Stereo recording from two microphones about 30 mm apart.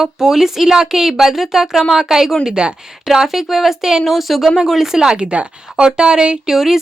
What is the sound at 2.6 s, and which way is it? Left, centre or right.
Speech, right.